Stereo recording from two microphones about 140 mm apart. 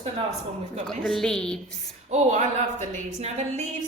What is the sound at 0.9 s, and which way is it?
Speech, 5° left (ahead or behind).